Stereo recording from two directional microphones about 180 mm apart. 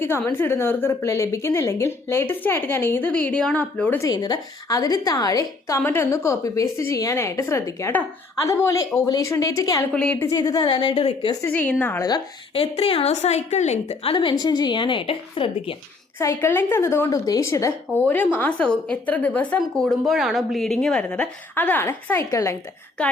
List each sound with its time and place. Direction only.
0.0 s a woman's voice: 10° left (ahead or behind)
4.1 s a woman's voice: 20° left (ahead or behind)
9.9 s a woman's voice: 5° left (ahead or behind)
10.3 s a woman's voice: 20° left (ahead or behind)
11.4 s a woman's voice: 10° left (ahead or behind)
12.0 s a woman's voice: 25° left (ahead or behind)
12.7 s a woman's voice: 35° left (ahead or behind)
16.1 s a woman's voice: 15° left (ahead or behind)
23.0 s a woman's voice: 5° left (ahead or behind)